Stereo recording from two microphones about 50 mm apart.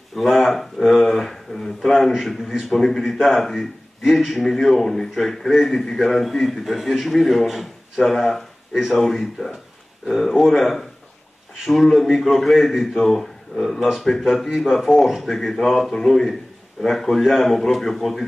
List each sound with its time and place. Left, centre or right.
0.1 s a man's voice: centre